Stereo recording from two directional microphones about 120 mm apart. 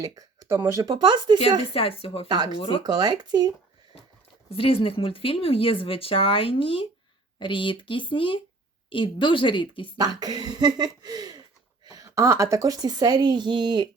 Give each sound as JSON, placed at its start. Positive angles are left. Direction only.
{"t": 0.0, "sound": "a sound", "side_deg": -30}
{"t": 0.5, "sound": "a woman's voice", "side_deg": -25}
{"t": 1.4, "sound": "speech", "side_deg": 50}
{"t": 2.2, "sound": "a woman's voice", "side_deg": -35}
{"t": 2.6, "sound": "speech", "side_deg": 45}
{"t": 2.8, "sound": "a woman's voice", "side_deg": -35}
{"t": 4.5, "sound": "speech", "side_deg": 50}
{"t": 10.0, "sound": "a woman's voice", "side_deg": -35}